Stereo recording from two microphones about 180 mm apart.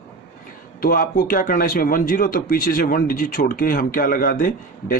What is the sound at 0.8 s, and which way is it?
Speech, 55° left (ahead or behind).